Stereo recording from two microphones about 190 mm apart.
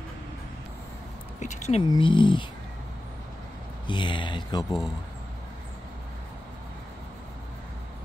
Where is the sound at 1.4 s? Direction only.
40° left (ahead or behind).